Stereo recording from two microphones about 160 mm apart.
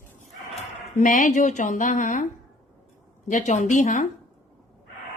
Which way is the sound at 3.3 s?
50° left (ahead or behind).